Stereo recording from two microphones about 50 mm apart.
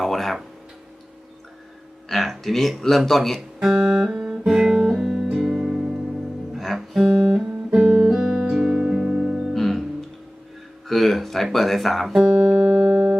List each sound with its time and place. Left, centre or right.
0.0 s a sound: centre
2.0 s a man's voice: centre
3.8 s guitar: centre
7.0 s guitar: right
9.5 s music: centre
11.4 s a man's voice: centre
12.1 s music: right